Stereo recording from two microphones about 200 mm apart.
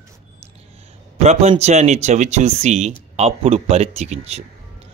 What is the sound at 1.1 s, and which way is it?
A man's voice, 30° right (ahead or behind).